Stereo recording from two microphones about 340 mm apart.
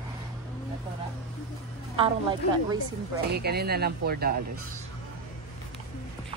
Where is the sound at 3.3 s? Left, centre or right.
Right.